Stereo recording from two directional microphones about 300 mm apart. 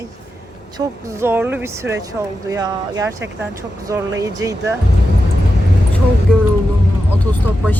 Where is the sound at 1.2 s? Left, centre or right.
Centre.